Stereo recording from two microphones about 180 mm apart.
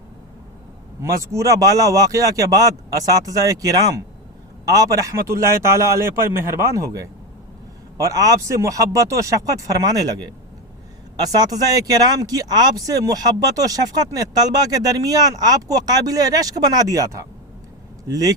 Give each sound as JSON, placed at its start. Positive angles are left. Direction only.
{"t": 1.0, "sound": "a man's voice", "side_deg": -15}